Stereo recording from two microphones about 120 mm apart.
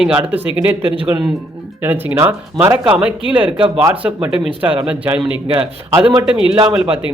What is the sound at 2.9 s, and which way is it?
Speech, 10° right (ahead or behind).